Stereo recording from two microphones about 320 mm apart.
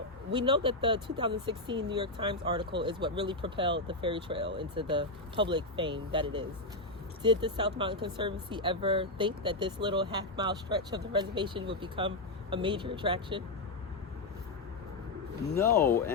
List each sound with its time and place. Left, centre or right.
0.3 s speech: centre
15.5 s speech: centre